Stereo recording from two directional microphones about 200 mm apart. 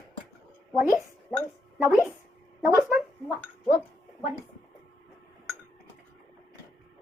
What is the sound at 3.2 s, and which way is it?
Chink, 10° left (ahead or behind).